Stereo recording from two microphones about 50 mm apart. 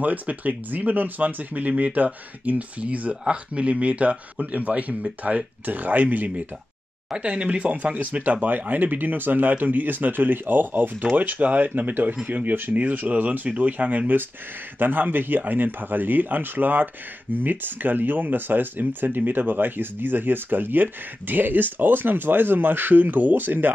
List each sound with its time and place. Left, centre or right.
0.0 s speech: right